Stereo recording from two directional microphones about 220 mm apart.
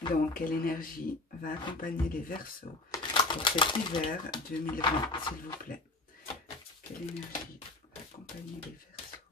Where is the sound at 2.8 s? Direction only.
20° left (ahead or behind).